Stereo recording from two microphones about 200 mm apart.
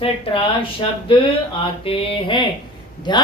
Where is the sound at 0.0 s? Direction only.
25° left (ahead or behind).